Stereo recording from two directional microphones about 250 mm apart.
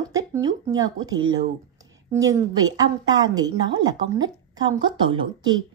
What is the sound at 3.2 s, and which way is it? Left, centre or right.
Speech, centre.